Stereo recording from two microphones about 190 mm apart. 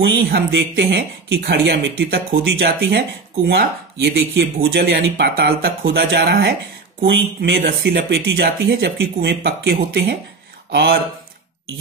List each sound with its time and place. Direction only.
0.0 s speech: 70° right (ahead or behind)